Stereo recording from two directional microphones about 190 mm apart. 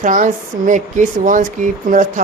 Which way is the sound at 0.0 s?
45° right (ahead or behind).